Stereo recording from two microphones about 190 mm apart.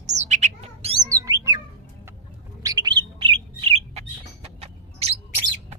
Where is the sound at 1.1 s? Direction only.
15° right (ahead or behind).